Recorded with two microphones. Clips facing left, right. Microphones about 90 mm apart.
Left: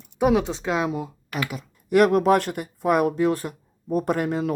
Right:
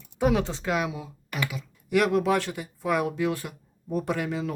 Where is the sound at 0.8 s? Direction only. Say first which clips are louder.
Left 6 dB; 50° left (ahead or behind).